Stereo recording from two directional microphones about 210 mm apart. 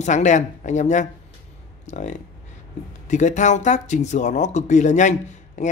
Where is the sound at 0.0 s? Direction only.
35° left (ahead or behind).